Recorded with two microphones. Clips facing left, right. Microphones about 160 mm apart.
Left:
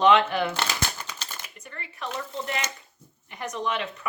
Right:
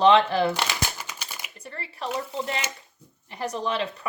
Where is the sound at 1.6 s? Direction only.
30° right (ahead or behind).